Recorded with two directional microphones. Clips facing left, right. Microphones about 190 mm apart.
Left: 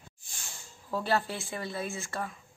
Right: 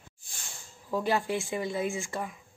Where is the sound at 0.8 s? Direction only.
15° right (ahead or behind).